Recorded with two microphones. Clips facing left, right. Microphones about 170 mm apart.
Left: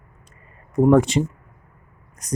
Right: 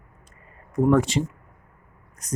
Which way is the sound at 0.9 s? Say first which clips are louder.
Left 4 dB; 20° left (ahead or behind).